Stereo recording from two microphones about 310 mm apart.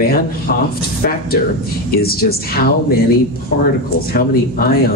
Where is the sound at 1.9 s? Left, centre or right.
Left.